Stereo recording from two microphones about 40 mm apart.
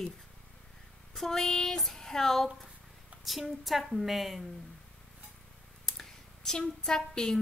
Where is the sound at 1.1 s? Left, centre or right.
Centre.